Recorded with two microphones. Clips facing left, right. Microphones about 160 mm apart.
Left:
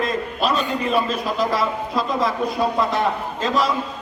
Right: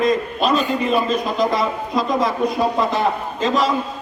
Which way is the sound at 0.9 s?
5° left (ahead or behind).